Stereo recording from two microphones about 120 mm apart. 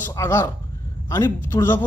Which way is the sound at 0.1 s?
25° left (ahead or behind).